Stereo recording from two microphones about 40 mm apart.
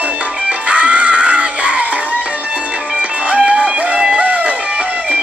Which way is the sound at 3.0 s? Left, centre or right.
Right.